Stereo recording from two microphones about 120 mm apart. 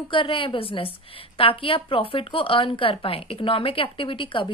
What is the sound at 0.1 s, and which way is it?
A woman's voice, 45° left (ahead or behind).